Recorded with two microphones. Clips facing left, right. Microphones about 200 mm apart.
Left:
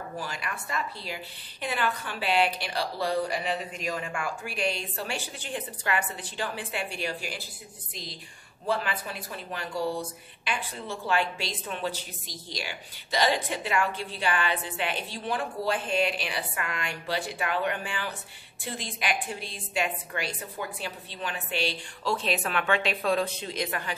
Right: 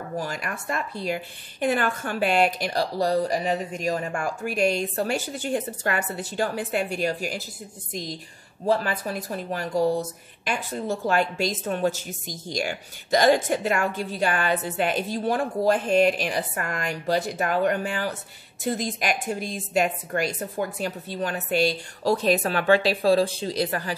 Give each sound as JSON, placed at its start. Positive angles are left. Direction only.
{"t": 0.2, "sound": "a woman's voice", "side_deg": -45}